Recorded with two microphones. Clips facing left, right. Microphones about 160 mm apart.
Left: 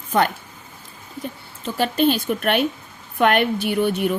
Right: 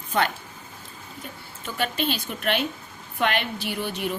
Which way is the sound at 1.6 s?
40° left (ahead or behind).